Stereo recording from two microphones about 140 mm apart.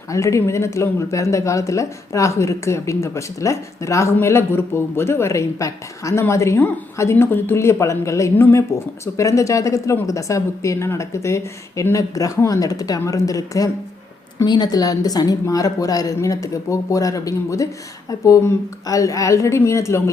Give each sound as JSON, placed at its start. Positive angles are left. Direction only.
{"t": 0.1, "sound": "speech", "side_deg": 20}